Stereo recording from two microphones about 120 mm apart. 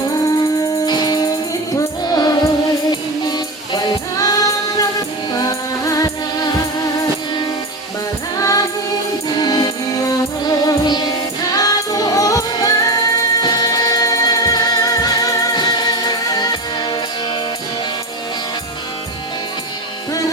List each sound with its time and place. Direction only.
0.1 s music: 30° left (ahead or behind)
8.4 s music: 30° left (ahead or behind)